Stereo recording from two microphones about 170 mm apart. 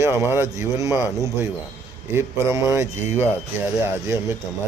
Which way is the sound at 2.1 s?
15° right (ahead or behind).